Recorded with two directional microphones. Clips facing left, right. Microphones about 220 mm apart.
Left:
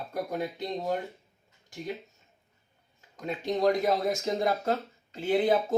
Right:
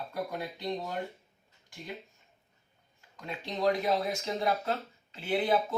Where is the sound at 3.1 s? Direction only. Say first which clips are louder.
Left 8 dB; 45° left (ahead or behind).